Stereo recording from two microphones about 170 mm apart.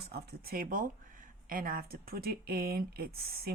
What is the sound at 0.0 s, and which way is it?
Speech, 65° right (ahead or behind).